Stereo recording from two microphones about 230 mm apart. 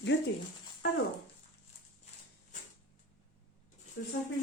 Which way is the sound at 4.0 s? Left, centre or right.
Left.